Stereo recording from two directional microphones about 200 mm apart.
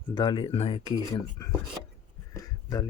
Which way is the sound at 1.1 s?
15° left (ahead or behind).